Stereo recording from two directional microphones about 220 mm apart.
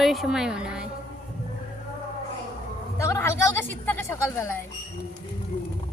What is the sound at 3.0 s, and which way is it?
A woman's voice, 15° left (ahead or behind).